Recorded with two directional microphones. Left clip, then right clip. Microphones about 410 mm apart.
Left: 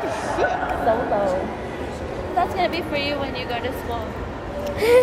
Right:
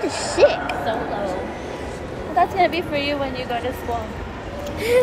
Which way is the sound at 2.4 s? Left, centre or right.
Right.